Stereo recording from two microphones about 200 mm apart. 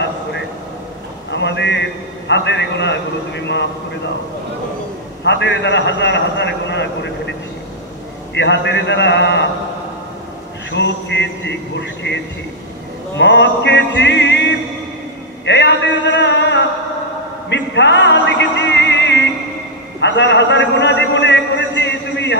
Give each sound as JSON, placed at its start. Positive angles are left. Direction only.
{"t": 1.3, "sound": "a man's voice", "side_deg": 60}
{"t": 5.2, "sound": "a man's voice", "side_deg": 60}
{"t": 8.4, "sound": "a man's voice", "side_deg": 60}
{"t": 10.7, "sound": "a man's voice", "side_deg": 60}
{"t": 13.2, "sound": "a man's voice", "side_deg": 60}
{"t": 15.4, "sound": "a sound", "side_deg": 60}